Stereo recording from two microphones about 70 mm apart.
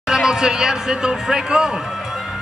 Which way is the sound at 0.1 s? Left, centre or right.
Centre.